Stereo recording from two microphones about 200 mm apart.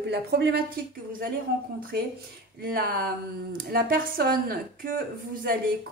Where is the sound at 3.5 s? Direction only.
45° right (ahead or behind).